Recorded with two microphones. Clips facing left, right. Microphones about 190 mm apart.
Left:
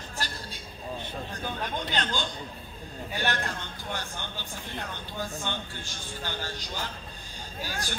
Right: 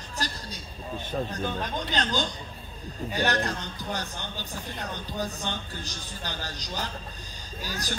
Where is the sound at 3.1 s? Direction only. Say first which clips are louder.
Right 4 dB; 40° right (ahead or behind).